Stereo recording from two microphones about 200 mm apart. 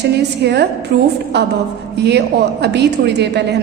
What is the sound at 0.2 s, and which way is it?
A woman's voice, 55° right (ahead or behind).